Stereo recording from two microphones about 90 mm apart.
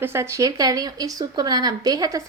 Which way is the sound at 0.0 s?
30° right (ahead or behind).